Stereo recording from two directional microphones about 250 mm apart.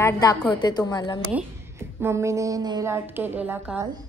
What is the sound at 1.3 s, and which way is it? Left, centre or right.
A woman's voice, centre.